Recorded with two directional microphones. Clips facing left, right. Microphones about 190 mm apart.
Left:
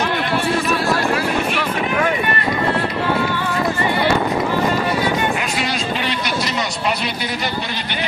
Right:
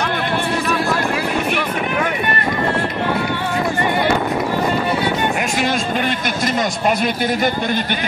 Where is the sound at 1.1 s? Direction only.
15° right (ahead or behind).